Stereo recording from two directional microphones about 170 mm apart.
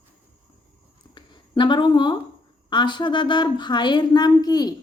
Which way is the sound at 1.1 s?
25° left (ahead or behind).